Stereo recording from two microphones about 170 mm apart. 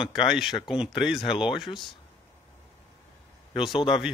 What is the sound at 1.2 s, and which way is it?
Speech, 30° left (ahead or behind).